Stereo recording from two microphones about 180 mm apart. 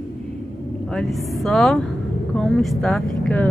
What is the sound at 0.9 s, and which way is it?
Speech, centre (ahead or behind).